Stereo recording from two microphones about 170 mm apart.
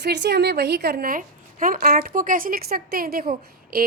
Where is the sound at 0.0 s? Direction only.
85° right.